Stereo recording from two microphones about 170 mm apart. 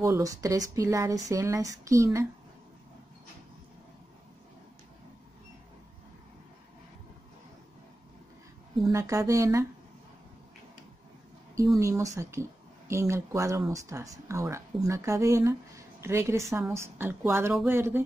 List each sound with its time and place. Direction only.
0.0 s speech: 20° right (ahead or behind)
8.9 s speech: 20° right (ahead or behind)
11.8 s speech: 20° right (ahead or behind)